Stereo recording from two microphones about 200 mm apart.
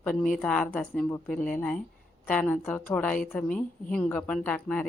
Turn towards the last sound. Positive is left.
turn(degrees=5)  # may be behind; listen again after turning